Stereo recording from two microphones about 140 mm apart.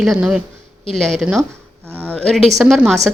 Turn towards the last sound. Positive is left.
turn(degrees=0)  # may be behind; listen again after turning